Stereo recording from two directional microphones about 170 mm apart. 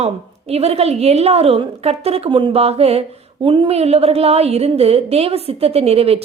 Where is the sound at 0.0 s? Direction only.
40° right (ahead or behind).